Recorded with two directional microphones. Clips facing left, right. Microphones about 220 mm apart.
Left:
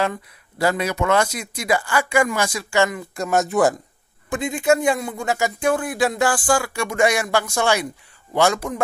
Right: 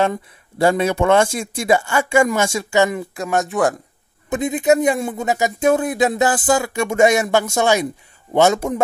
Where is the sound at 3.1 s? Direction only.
Centre (ahead or behind).